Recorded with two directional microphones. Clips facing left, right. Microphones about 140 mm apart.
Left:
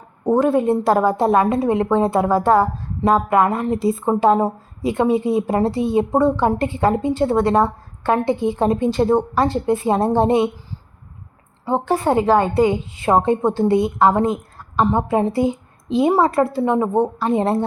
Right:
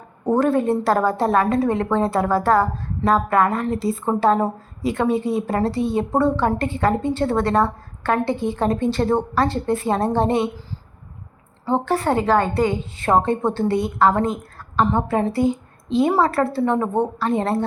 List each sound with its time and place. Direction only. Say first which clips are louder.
0.3 s a woman's voice: left 2 dB; 15° left (ahead or behind)
11.6 s a woman's voice: left 1 dB; 20° left (ahead or behind)